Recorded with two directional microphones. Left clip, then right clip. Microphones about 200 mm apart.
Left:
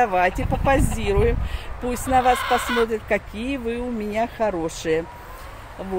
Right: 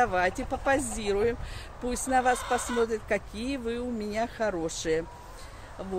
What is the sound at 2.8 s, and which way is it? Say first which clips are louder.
Speech: left 6 dB; 5° left (ahead or behind).